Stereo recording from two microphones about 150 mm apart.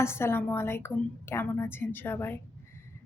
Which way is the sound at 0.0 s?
15° left (ahead or behind).